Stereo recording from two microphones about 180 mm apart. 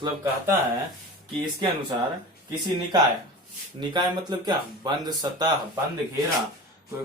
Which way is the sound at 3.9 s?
25° right (ahead or behind).